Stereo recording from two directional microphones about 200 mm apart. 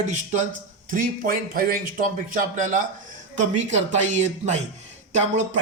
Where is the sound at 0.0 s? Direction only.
35° right (ahead or behind).